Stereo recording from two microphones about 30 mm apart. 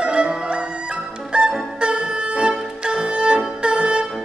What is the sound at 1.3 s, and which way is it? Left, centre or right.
Music, right.